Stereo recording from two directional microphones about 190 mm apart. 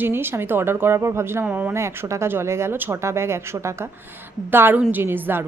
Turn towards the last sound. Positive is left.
turn(degrees=-10)  # may be behind; listen again after turning